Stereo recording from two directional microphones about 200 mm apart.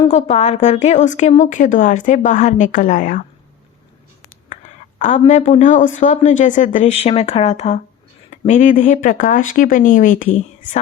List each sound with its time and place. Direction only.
0.1 s speech: 35° left (ahead or behind)
4.9 s a woman's voice: 40° left (ahead or behind)